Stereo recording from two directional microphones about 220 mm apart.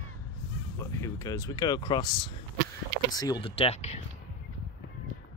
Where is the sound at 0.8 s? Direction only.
15° left (ahead or behind); by 3.9 s 30° left (ahead or behind).